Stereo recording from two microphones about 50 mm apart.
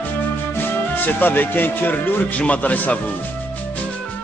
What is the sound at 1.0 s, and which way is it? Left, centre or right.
A man's voice, left.